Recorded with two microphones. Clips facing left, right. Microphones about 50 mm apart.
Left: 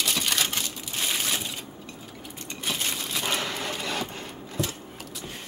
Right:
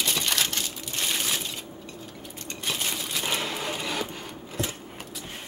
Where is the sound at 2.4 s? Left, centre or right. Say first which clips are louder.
Even; centre.